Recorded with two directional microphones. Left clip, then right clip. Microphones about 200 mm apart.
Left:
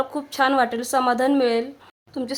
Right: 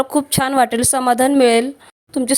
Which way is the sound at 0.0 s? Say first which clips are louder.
Right 4 dB; 30° right (ahead or behind).